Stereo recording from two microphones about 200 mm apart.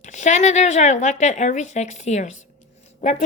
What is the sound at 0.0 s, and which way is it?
A woman's voice, 35° left (ahead or behind).